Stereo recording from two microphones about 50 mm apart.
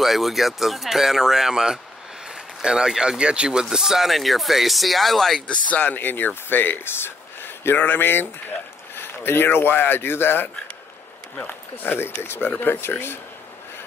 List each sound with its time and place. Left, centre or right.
0.0 s speech: centre
5.5 s speech: left
5.9 s speech: left
7.7 s speech: left
12.4 s speech: left